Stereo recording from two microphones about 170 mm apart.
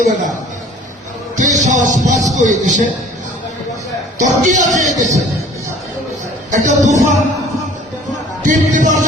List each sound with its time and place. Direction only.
1.4 s speech: 45° right (ahead or behind)
4.2 s speech: 45° right (ahead or behind)
6.5 s speech: 45° right (ahead or behind)
8.4 s speech: 50° right (ahead or behind)